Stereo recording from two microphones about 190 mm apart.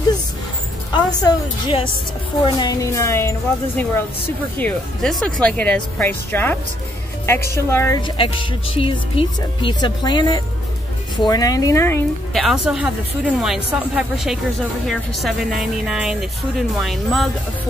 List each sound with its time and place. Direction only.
0.9 s speech: 25° left (ahead or behind)
8.7 s speech: 30° left (ahead or behind)
12.4 s speech: 5° right (ahead or behind)